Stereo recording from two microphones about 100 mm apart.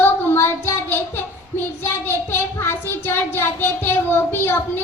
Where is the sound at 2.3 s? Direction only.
25° left (ahead or behind).